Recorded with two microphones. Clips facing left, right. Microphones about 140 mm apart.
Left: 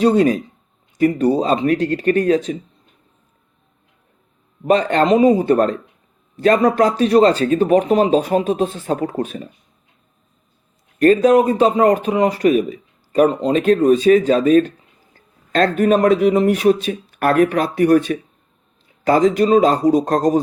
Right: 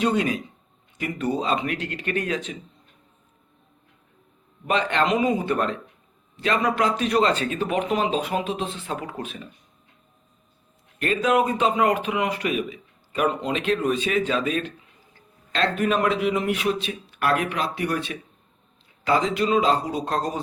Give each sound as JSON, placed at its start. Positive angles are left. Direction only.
{"t": 0.0, "sound": "a man's voice", "side_deg": 40}
{"t": 4.6, "sound": "a man's voice", "side_deg": 40}
{"t": 11.0, "sound": "a man's voice", "side_deg": 40}